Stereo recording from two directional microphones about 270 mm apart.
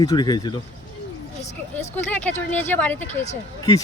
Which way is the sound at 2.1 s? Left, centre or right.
Centre.